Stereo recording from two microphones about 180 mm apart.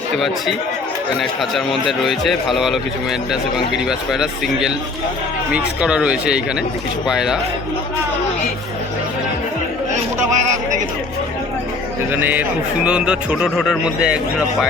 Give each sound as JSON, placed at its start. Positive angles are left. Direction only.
{"t": 1.2, "sound": "a man's voice", "side_deg": 0}
{"t": 9.9, "sound": "chatter", "side_deg": -40}
{"t": 12.1, "sound": "a man's voice", "side_deg": -10}